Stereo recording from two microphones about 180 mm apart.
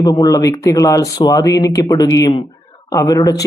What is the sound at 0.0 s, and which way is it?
Speech, 20° left (ahead or behind).